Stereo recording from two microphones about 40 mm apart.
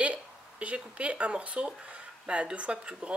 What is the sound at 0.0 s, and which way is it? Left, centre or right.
Speech, right.